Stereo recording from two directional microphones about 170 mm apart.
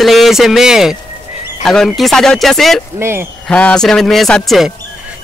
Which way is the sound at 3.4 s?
5° left (ahead or behind).